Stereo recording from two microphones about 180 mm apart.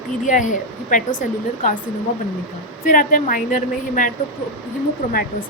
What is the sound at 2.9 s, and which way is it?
Speech, 50° left (ahead or behind).